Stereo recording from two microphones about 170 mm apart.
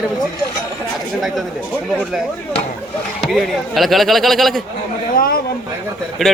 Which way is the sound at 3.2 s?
Centre (ahead or behind).